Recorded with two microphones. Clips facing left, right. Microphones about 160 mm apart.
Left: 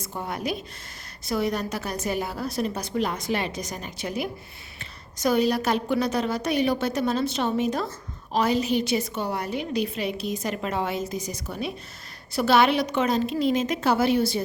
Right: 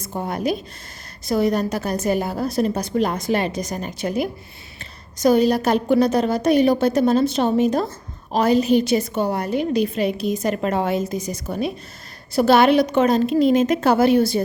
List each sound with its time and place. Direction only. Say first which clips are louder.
0.0 s a woman's voice: right 6 dB; 40° right (ahead or behind)